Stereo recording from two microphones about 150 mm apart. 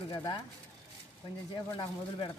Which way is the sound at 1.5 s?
35° left (ahead or behind).